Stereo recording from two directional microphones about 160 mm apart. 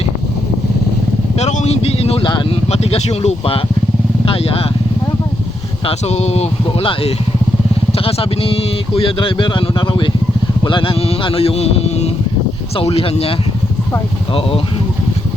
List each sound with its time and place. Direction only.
1.4 s speech: 45° left (ahead or behind)
5.8 s speech: 40° left (ahead or behind)